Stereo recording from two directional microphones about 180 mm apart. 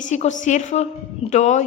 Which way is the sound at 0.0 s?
40° left (ahead or behind).